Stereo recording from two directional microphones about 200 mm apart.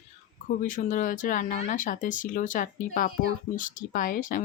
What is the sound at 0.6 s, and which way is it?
Speech, 40° left (ahead or behind).